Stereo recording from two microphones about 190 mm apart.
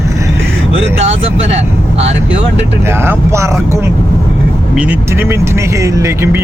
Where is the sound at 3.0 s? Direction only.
15° right (ahead or behind).